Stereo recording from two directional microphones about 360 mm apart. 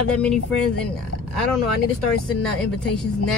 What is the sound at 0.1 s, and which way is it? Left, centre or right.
Speech, centre.